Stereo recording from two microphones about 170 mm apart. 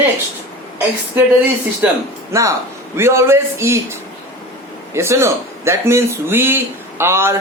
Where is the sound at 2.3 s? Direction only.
20° right (ahead or behind).